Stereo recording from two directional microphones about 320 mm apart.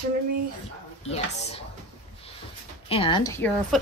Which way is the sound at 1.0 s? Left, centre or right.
Centre.